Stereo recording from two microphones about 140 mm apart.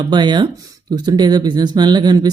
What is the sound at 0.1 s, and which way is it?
Speech, 30° right (ahead or behind).